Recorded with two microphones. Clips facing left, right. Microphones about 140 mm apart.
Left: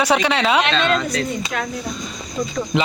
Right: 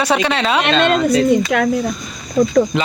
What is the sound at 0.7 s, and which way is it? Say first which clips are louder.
Speech: right 5 dB; 55° right (ahead or behind).